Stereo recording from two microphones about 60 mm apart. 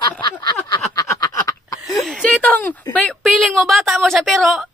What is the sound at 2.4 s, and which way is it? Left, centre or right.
Speech, left.